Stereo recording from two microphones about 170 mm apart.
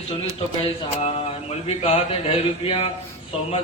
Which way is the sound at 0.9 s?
40° left (ahead or behind).